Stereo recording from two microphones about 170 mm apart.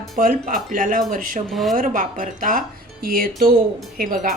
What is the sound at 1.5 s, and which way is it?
Speech, centre (ahead or behind).